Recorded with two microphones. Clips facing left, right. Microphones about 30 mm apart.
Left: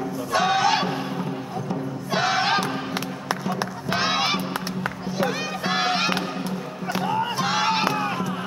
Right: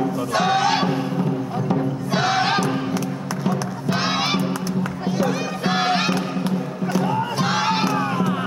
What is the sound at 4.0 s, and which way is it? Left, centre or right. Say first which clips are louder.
Honk: even; centre.